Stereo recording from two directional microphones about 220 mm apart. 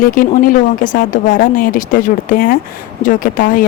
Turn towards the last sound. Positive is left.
turn(degrees=35)  # may be behind; listen again after turning